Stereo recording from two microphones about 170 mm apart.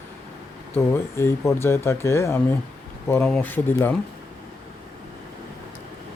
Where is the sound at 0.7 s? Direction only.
15° left (ahead or behind).